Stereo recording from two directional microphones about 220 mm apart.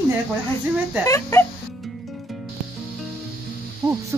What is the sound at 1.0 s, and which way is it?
Speech, 10° left (ahead or behind).